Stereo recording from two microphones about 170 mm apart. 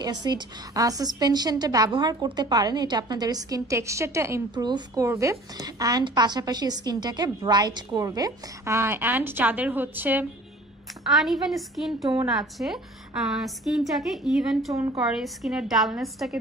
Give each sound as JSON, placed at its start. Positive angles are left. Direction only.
{"t": 0.0, "sound": "a woman's voice", "side_deg": -25}
{"t": 14.7, "sound": "a woman's voice", "side_deg": -20}
{"t": 15.0, "sound": "a woman's voice", "side_deg": -5}